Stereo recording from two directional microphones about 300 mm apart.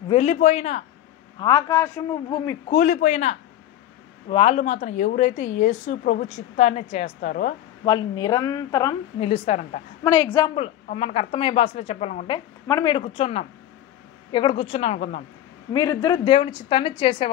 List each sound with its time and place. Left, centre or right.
0.1 s a woman's voice: left
1.4 s a woman's voice: centre
2.8 s a woman's voice: left
10.0 s a woman's voice: centre